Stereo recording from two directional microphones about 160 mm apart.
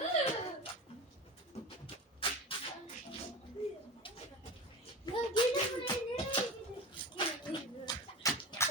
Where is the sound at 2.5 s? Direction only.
35° left (ahead or behind).